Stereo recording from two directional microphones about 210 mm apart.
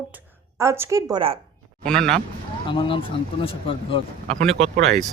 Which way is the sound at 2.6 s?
25° left (ahead or behind).